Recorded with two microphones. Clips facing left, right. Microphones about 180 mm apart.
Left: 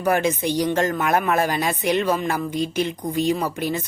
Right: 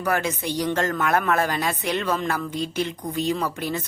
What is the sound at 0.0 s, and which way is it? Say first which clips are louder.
Speech: left 4 dB; 20° left (ahead or behind).